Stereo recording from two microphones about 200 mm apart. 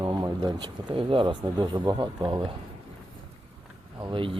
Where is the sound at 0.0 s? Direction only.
20° right (ahead or behind).